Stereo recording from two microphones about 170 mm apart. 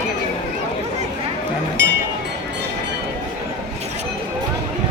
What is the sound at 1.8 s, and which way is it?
Music, 90° right.